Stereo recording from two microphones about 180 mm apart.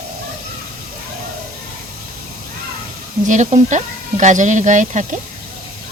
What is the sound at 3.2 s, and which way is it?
Speech, 40° right (ahead or behind).